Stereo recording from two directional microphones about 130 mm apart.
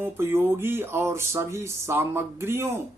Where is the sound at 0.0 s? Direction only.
15° right (ahead or behind).